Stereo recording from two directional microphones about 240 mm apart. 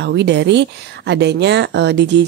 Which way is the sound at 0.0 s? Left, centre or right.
Right.